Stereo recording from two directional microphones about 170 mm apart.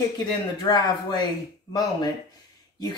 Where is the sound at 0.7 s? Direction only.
25° left (ahead or behind).